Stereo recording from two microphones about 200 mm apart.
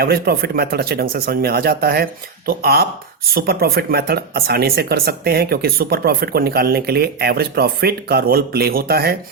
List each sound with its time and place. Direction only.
0.0 s speech: 50° right (ahead or behind)